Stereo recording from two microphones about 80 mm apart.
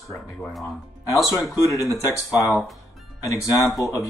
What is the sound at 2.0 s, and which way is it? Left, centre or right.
Speech, left.